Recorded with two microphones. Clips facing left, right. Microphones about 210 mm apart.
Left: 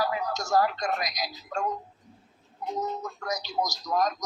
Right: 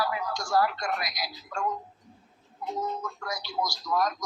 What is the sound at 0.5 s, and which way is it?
A man's voice, 20° left (ahead or behind).